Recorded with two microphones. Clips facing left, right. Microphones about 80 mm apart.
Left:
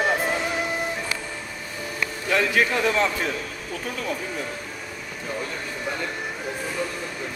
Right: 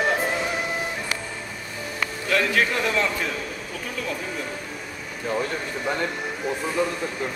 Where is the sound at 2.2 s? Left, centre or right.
Centre.